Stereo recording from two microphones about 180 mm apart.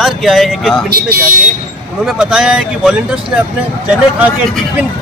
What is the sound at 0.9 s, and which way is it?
Speech, 55° right (ahead or behind).